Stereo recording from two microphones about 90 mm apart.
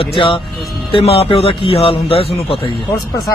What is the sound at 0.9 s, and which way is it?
A man's voice, 90° left.